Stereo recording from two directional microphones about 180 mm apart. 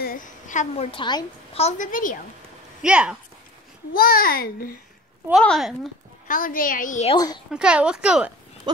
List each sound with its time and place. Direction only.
0.0 s a sound: 50° left (ahead or behind)
0.9 s a woman's voice: 25° left (ahead or behind); by 2.1 s 45° left (ahead or behind)
2.8 s speech: 5° right (ahead or behind)
3.9 s a child's voice: 55° left (ahead or behind)
5.3 s speech: centre (ahead or behind)
6.2 s a woman's voice: 50° left (ahead or behind)
7.2 s speech: 20° left (ahead or behind)
7.5 s speech: 5° right (ahead or behind)